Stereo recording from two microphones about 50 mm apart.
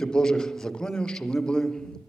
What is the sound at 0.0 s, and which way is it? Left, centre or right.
A man's voice, centre.